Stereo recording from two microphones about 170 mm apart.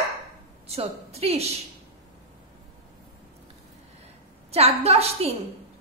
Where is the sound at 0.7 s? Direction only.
35° right (ahead or behind).